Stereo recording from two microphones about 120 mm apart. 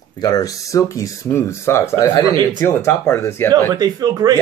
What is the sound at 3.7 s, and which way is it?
Speech, 30° right (ahead or behind).